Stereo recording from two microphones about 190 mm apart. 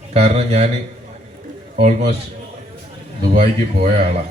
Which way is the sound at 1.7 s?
30° right (ahead or behind).